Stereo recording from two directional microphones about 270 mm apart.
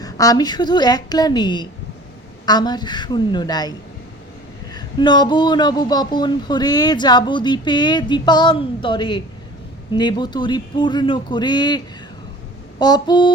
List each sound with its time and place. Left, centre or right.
0.0 s speech: centre
12.8 s speech: centre